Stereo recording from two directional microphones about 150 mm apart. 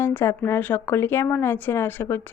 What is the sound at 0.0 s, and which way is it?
A woman's voice, 15° left (ahead or behind).